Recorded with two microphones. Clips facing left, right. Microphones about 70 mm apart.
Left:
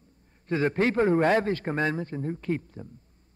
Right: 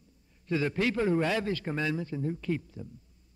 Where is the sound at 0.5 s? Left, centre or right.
Left.